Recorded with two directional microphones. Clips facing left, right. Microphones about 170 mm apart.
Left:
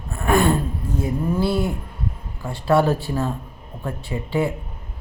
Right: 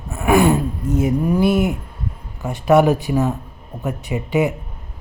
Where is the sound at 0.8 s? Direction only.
90° right.